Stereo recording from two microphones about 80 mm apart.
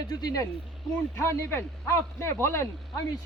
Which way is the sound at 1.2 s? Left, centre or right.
Left.